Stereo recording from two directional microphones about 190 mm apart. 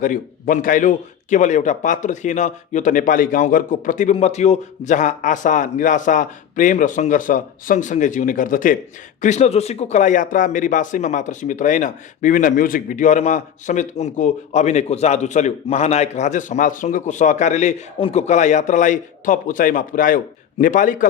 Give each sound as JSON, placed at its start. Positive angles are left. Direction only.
{"t": 0.0, "sound": "speech", "side_deg": 45}